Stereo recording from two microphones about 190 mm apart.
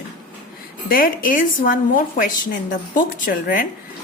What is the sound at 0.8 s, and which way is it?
A woman's voice, 50° left (ahead or behind).